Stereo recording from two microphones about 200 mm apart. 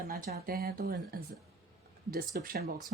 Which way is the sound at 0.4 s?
50° right (ahead or behind).